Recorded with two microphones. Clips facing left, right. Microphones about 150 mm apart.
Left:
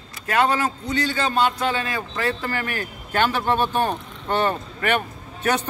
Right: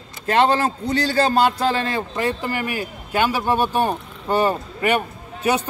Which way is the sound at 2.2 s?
15° right (ahead or behind).